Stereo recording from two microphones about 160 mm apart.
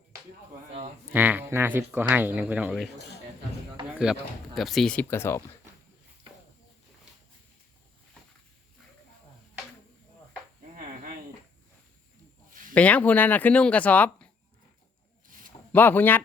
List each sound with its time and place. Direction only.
1.1 s speech: 10° right (ahead or behind)
3.9 s speech: 5° right (ahead or behind); by 5.4 s 15° left (ahead or behind)
12.7 s speech: 10° left (ahead or behind)
15.7 s speech: 10° left (ahead or behind)